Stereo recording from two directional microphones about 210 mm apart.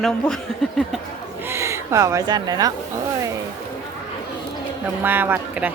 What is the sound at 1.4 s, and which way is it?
Speech, 15° right (ahead or behind).